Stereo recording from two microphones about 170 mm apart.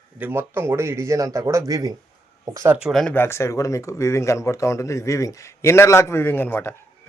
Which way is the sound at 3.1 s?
15° left (ahead or behind).